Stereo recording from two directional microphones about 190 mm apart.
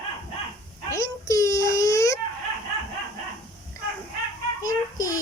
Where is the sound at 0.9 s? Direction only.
15° left (ahead or behind).